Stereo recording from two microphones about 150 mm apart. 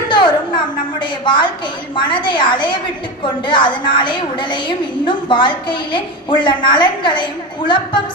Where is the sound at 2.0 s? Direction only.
30° left (ahead or behind).